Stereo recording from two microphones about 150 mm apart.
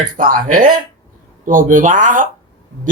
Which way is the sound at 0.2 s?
65° right (ahead or behind).